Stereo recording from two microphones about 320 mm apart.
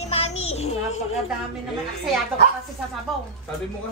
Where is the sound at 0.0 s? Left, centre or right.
Centre.